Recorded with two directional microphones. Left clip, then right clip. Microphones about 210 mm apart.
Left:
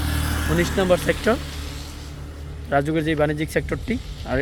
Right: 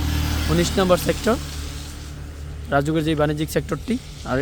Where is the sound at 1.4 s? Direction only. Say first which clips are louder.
Even; 60° right (ahead or behind).